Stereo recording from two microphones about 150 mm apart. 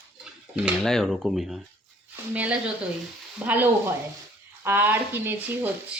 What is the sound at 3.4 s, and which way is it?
Speech, 10° right (ahead or behind).